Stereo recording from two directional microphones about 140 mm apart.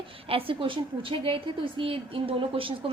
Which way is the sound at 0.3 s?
40° right (ahead or behind).